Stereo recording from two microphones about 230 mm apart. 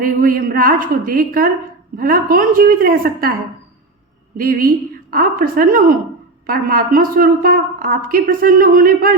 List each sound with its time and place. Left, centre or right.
0.0 s a woman's voice: right
4.4 s a woman's voice: right